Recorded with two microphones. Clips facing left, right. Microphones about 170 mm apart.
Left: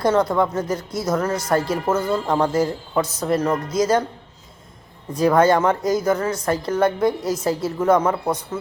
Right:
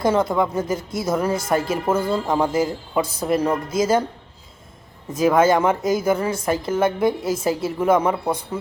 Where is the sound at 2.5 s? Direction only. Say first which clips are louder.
Left 1 dB; 25° right (ahead or behind).